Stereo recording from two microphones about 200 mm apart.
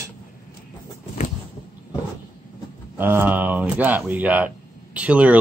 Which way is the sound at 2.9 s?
10° right (ahead or behind).